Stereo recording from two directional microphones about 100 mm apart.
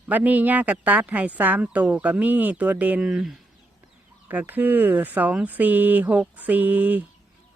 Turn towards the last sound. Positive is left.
turn(degrees=-15)  # may be behind; listen again after turning